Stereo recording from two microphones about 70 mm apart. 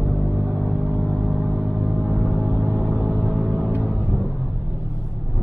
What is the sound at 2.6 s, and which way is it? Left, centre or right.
Gong, right.